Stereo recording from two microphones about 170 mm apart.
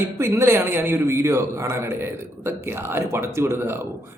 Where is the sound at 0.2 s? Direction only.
15° right (ahead or behind).